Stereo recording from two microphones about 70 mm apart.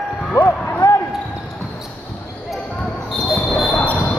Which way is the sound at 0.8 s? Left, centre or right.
Left.